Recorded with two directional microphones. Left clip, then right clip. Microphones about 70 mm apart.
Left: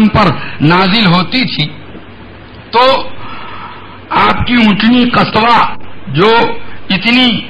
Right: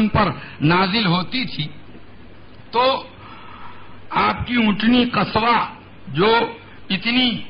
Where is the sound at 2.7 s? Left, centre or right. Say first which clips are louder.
Left 10 dB; right.